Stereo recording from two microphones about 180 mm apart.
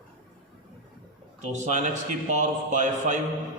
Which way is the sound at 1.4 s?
40° right (ahead or behind).